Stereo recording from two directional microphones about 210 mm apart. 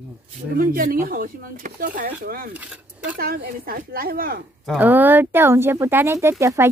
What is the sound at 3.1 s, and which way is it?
Speech, 45° right (ahead or behind).